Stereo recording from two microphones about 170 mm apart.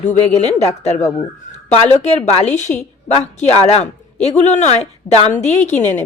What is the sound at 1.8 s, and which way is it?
A woman's voice, 40° left (ahead or behind).